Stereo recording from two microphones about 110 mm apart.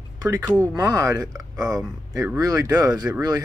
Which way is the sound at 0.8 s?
30° right (ahead or behind).